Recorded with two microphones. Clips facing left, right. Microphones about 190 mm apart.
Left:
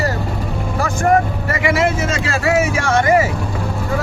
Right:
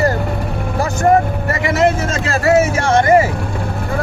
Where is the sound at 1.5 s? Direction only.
45° right (ahead or behind).